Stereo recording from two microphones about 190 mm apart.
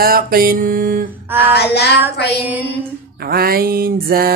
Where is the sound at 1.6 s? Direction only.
60° left (ahead or behind).